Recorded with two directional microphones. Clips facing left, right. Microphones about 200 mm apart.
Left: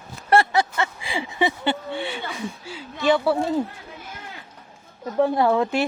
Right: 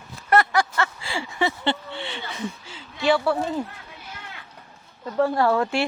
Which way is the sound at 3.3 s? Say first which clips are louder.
Left 2 dB; centre (ahead or behind).